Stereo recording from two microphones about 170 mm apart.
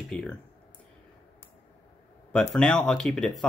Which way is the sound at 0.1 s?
5° left (ahead or behind).